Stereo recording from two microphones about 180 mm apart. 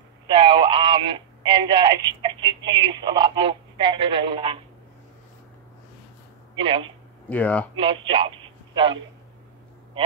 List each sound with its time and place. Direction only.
0.3 s speech: 25° right (ahead or behind)
6.6 s speech: 30° right (ahead or behind)
7.2 s speech: 10° left (ahead or behind)
7.7 s speech: 30° right (ahead or behind)